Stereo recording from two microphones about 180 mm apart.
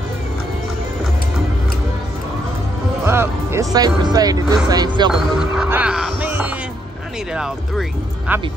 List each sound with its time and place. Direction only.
3.1 s speech: 15° right (ahead or behind)
5.1 s speech: 5° right (ahead or behind)